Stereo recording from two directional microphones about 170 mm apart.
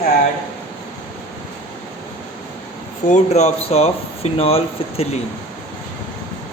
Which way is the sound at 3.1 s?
40° left (ahead or behind).